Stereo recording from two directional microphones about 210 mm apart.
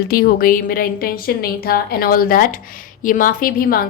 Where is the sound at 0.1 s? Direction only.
45° left (ahead or behind).